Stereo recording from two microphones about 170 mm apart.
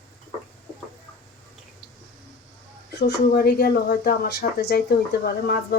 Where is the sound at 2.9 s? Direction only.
75° left (ahead or behind).